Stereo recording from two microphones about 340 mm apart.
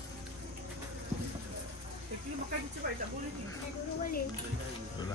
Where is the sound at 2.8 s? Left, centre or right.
Right.